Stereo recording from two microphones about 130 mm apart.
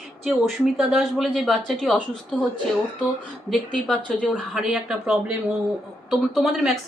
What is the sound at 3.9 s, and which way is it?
Speech, 10° left (ahead or behind).